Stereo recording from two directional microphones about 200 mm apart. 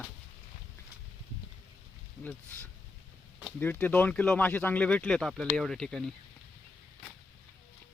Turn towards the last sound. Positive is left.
turn(degrees=5)  # may be behind; listen again after turning